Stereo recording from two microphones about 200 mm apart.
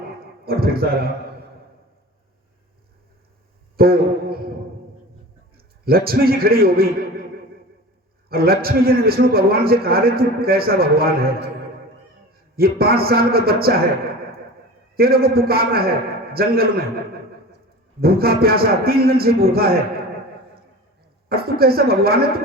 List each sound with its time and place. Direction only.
0.2 s a man's voice: 50° right (ahead or behind)
3.8 s a sound: 50° right (ahead or behind)
5.5 s a man's voice: 50° right (ahead or behind)
8.3 s a man's voice: 50° right (ahead or behind)
12.5 s a man's voice: 50° right (ahead or behind)
18.0 s a man's voice: 50° right (ahead or behind)
21.2 s a man's voice: 50° right (ahead or behind)